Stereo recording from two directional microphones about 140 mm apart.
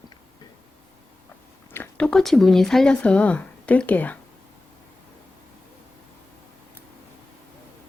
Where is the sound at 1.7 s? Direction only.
10° left (ahead or behind).